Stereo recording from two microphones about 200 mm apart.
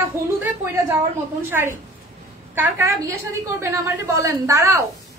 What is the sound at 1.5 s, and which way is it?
A woman's voice, 10° right (ahead or behind).